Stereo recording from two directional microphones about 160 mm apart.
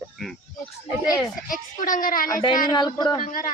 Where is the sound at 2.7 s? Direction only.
25° left (ahead or behind).